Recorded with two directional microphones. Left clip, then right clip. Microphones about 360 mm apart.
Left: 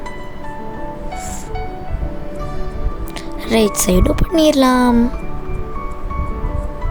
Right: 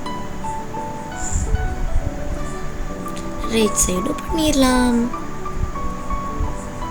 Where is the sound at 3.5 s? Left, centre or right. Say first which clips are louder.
Left 4 dB; left.